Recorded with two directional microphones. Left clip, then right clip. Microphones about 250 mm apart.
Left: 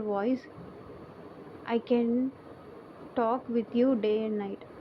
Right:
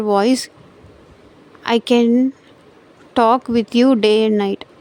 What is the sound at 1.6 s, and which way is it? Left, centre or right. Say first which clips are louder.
Speech: right 13 dB; right.